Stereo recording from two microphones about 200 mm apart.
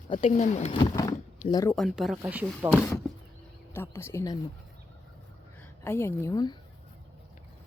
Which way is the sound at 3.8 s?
15° left (ahead or behind).